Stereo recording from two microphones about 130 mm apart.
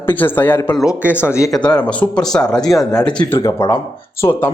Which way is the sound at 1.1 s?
20° left (ahead or behind).